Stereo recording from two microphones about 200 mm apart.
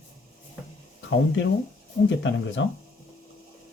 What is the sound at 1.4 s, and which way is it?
Speech, 65° left (ahead or behind).